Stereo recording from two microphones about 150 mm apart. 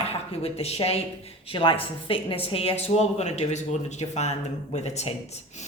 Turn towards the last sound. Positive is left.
turn(degrees=45)  # may be behind; listen again after turning